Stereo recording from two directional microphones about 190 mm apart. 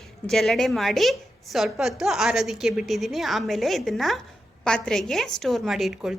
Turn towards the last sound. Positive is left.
turn(degrees=0)  # may be behind; listen again after turning